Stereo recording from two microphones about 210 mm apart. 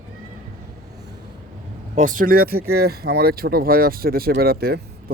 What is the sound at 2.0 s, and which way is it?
Speech, 40° right (ahead or behind).